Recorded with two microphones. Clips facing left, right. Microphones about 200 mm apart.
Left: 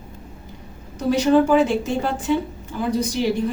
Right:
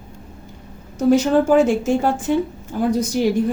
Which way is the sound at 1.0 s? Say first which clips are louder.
Right 2 dB; 45° right (ahead or behind).